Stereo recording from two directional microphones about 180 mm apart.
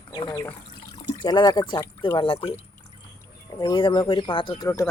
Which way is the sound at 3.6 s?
25° left (ahead or behind).